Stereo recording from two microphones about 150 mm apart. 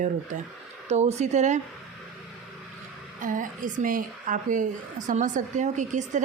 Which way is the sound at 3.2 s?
60° right (ahead or behind).